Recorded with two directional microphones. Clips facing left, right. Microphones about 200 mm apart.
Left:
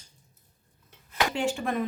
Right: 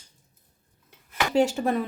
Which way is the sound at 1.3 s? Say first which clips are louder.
Right 10 dB; 40° right (ahead or behind).